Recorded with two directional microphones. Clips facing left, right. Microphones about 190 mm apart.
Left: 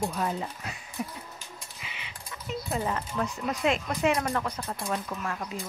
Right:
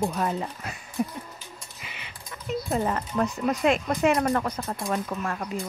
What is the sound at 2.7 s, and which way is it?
Speech, 45° right (ahead or behind).